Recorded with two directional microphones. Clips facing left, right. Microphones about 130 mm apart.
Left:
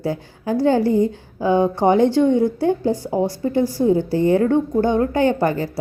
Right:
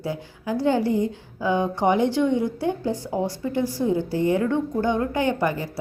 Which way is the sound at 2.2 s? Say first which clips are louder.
Left 6 dB; 45° left (ahead or behind).